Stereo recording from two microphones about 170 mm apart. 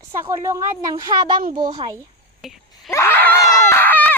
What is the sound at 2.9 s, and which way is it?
Screaming, 15° left (ahead or behind).